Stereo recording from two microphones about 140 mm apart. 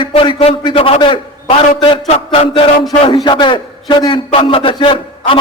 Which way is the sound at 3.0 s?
35° left (ahead or behind).